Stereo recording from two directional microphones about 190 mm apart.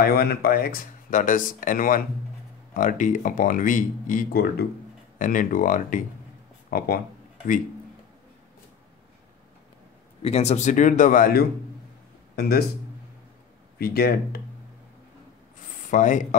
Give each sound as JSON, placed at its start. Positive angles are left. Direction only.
{"t": 0.0, "sound": "speech", "side_deg": 55}
{"t": 5.2, "sound": "speech", "side_deg": 45}
{"t": 10.2, "sound": "speech", "side_deg": 35}
{"t": 13.7, "sound": "speech", "side_deg": 55}
{"t": 15.9, "sound": "speech", "side_deg": 40}